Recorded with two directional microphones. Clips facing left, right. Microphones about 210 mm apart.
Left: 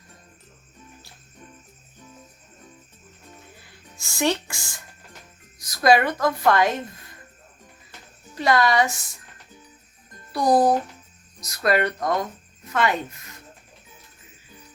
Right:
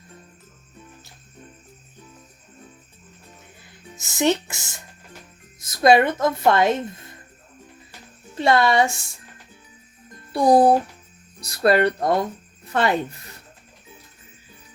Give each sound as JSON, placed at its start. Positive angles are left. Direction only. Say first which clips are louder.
{"t": 3.9, "sound": "speech", "louder": "right 3 dB", "side_deg": -20}
{"t": 8.4, "sound": "speech", "louder": "right 2 dB", "side_deg": -25}
{"t": 10.3, "sound": "speech", "louder": "right 3 dB", "side_deg": -25}